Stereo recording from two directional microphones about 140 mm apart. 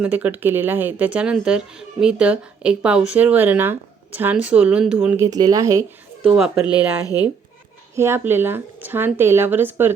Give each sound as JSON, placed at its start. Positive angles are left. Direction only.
{"t": 0.0, "sound": "speech", "side_deg": -10}
{"t": 6.2, "sound": "speech", "side_deg": -5}
{"t": 6.7, "sound": "speech", "side_deg": 30}
{"t": 7.9, "sound": "speech", "side_deg": -20}